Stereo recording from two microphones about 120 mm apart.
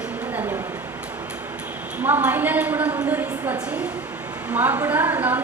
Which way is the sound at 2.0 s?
15° right (ahead or behind).